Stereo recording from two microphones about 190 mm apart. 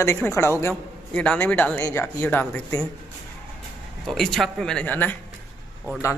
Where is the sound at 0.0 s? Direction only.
15° left (ahead or behind).